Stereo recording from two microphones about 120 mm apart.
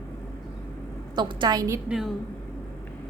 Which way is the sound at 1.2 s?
40° right (ahead or behind).